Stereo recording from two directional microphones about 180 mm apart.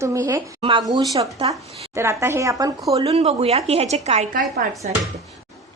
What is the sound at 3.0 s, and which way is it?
A woman's voice, 35° right (ahead or behind).